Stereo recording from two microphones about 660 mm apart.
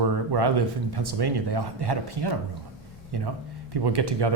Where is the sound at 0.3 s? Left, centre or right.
Right.